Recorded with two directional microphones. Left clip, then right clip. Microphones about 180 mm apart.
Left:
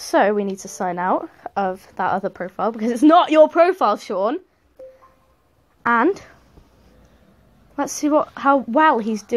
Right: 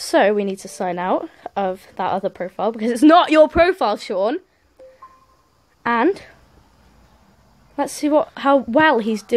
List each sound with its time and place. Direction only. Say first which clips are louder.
0.0 s a woman's voice: right 1 dB; 15° right (ahead or behind)
5.8 s speech: left 1 dB; 10° right (ahead or behind)
8.0 s a woman's voice: even; 15° right (ahead or behind)